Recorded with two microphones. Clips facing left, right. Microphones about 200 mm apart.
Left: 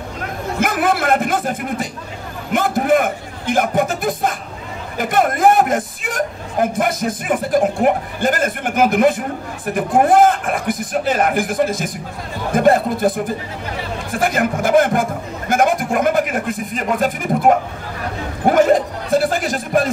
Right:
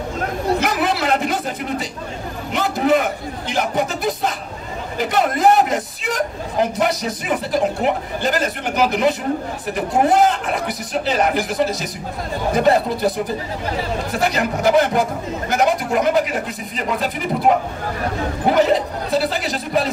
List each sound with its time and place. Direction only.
0.6 s chuckle: 50° left (ahead or behind)
2.5 s a man's voice: 50° left (ahead or behind)